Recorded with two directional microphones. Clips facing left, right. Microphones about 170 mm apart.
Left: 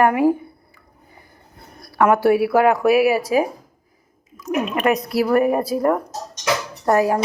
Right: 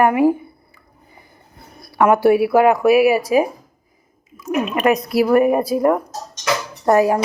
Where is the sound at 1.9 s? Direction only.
20° right (ahead or behind).